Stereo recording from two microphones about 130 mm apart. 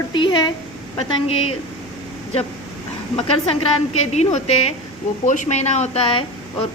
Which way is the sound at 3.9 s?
55° left (ahead or behind).